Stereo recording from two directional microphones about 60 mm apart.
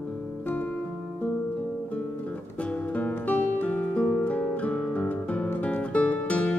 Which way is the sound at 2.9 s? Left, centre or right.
Left.